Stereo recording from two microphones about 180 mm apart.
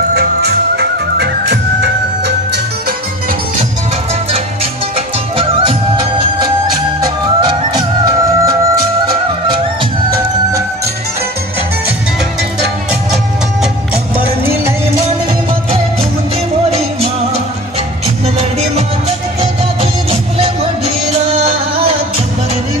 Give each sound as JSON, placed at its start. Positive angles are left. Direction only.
{"t": 0.7, "sound": "music", "side_deg": -65}
{"t": 4.9, "sound": "music", "side_deg": -30}
{"t": 19.4, "sound": "music", "side_deg": -35}